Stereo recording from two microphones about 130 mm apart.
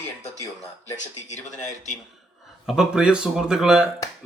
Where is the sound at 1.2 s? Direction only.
65° left (ahead or behind).